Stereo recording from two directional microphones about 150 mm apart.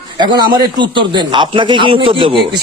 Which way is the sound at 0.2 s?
30° right (ahead or behind).